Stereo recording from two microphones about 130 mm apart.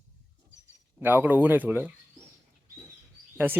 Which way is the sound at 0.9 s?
15° right (ahead or behind).